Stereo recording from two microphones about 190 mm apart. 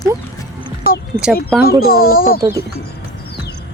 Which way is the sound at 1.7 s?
50° left (ahead or behind).